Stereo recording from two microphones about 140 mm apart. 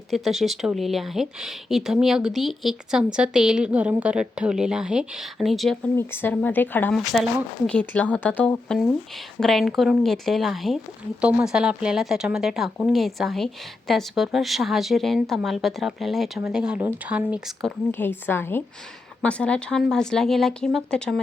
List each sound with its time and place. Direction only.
0.1 s speech: centre (ahead or behind)
6.0 s speech: 15° left (ahead or behind)
7.1 s speech: centre (ahead or behind)
17.9 s speech: 15° left (ahead or behind)